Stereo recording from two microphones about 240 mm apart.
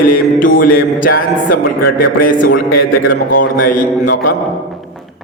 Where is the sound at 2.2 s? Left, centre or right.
Left.